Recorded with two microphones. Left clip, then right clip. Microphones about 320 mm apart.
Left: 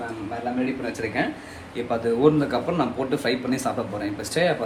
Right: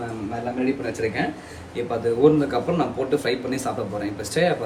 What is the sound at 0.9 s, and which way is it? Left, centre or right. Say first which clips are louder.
Speech: right 1 dB; centre.